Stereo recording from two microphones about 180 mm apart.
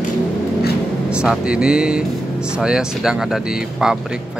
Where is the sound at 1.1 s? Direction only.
5° right (ahead or behind).